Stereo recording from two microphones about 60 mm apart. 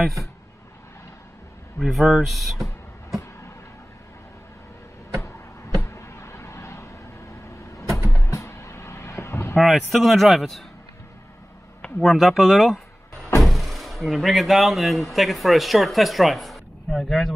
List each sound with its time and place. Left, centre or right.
0.0 s speech: centre
1.8 s speech: centre
5.8 s a sound: left
8.2 s vehicle: left
9.6 s speech: centre
12.0 s speech: centre